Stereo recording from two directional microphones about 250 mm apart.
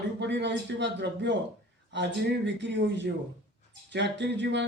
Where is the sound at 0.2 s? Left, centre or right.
Right.